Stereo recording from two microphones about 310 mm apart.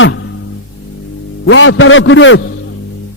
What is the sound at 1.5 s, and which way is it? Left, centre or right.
Speech, left.